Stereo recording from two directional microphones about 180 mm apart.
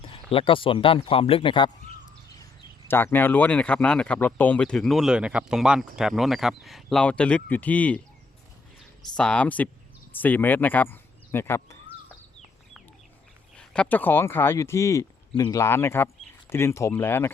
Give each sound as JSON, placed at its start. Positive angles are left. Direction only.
{"t": 0.0, "sound": "speech", "side_deg": 30}
{"t": 2.4, "sound": "speech", "side_deg": 15}
{"t": 9.1, "sound": "speech", "side_deg": 5}
{"t": 13.6, "sound": "speech", "side_deg": 10}